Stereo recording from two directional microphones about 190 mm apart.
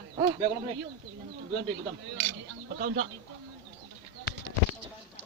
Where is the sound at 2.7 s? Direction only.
55° right (ahead or behind).